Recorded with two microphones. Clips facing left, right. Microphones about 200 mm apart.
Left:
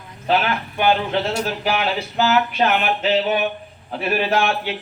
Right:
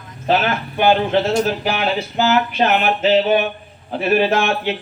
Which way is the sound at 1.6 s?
25° right (ahead or behind).